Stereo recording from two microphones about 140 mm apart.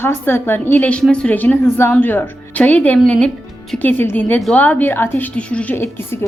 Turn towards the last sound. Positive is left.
turn(degrees=15)  # may be behind; listen again after turning